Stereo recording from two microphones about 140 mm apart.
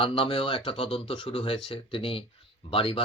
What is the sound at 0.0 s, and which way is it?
Speech, 40° left (ahead or behind).